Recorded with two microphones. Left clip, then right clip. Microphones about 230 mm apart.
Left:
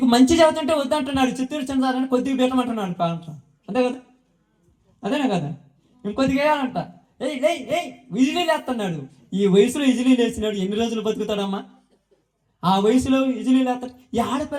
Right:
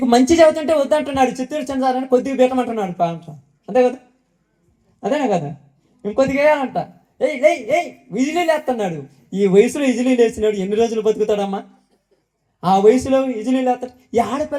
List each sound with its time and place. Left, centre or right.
0.0 s speech: left
4.9 s speech: left